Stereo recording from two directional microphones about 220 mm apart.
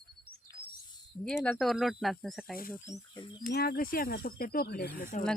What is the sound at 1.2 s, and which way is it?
Speech, 5° left (ahead or behind).